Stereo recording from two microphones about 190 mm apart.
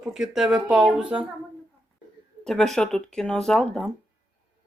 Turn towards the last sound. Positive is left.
turn(degrees=5)  # may be behind; listen again after turning